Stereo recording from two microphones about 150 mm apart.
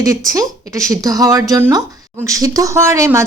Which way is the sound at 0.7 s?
20° right (ahead or behind).